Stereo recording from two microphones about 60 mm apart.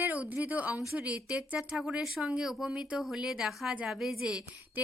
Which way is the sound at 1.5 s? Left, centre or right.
Centre.